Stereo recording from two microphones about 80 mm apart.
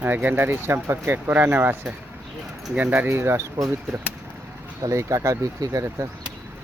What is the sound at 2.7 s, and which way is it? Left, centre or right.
Speech, right.